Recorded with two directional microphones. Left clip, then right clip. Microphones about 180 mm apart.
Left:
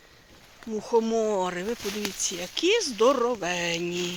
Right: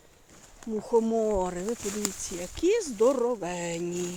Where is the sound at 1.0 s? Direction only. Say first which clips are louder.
Left 1 dB; 15° right (ahead or behind).